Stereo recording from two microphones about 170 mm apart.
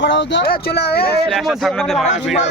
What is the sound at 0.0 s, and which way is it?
Speech, 90° left.